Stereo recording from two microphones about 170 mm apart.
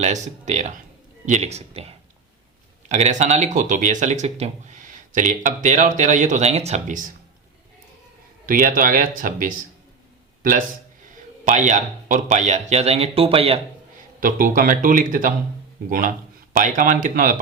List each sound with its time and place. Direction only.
0.0 s speech: 45° right (ahead or behind)
8.4 s speech: 55° right (ahead or behind); by 13.6 s 35° right (ahead or behind)
14.2 s speech: 55° right (ahead or behind)